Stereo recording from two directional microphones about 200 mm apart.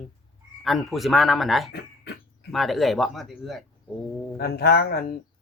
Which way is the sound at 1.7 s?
55° left (ahead or behind).